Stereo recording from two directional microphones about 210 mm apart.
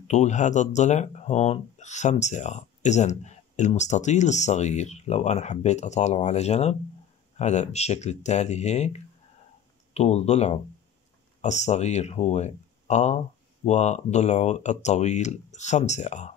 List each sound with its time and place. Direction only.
0.1 s speech: 35° left (ahead or behind)